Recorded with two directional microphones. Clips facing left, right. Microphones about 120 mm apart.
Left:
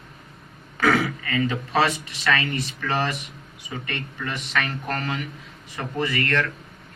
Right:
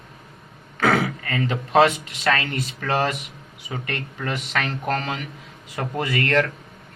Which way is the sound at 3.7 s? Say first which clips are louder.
Right 2 dB; 65° right (ahead or behind).